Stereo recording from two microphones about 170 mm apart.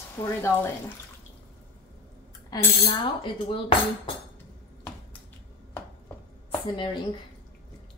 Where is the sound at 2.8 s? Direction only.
30° left (ahead or behind).